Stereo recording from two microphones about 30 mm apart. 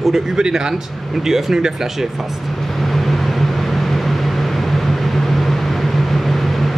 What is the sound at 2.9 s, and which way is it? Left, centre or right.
Vehicle, centre.